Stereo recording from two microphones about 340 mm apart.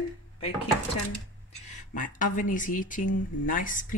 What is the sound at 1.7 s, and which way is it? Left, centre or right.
Speech, left.